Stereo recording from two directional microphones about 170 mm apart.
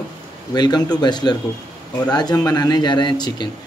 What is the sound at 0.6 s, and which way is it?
Speech, 25° left (ahead or behind).